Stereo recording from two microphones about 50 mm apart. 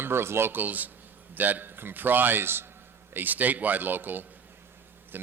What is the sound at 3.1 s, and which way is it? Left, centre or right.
Speech, right.